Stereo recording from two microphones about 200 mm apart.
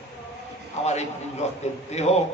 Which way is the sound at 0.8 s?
35° left (ahead or behind).